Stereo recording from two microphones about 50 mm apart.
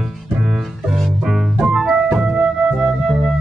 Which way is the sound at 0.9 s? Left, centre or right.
Centre.